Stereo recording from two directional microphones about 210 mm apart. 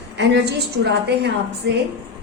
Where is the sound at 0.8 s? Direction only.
55° right (ahead or behind).